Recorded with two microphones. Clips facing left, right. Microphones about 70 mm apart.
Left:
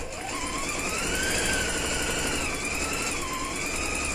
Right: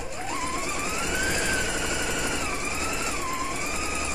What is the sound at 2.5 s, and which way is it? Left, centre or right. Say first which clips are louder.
Vehicle: right 1 dB; centre.